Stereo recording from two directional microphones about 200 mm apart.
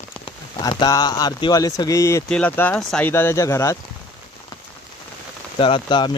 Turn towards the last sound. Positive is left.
turn(degrees=20)  # may be behind; listen again after turning